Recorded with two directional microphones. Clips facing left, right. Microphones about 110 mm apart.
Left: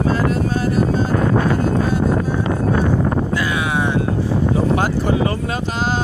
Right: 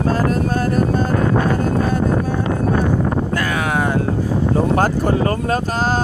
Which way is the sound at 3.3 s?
45° right (ahead or behind).